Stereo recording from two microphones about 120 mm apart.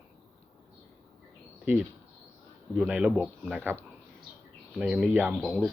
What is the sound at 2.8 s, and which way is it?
Speech, 10° right (ahead or behind).